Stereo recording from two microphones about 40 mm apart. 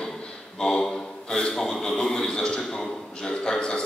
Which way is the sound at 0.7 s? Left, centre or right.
Left.